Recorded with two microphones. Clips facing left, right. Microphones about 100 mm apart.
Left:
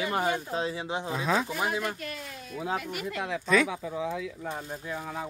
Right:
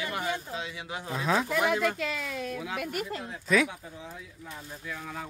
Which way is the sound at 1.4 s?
80° right.